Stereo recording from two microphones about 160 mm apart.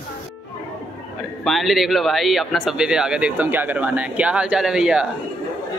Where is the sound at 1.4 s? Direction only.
Centre (ahead or behind).